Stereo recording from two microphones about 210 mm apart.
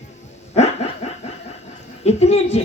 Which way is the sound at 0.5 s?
30° left (ahead or behind).